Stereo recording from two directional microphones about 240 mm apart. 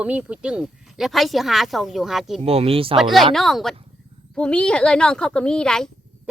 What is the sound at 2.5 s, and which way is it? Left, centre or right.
Speech, right.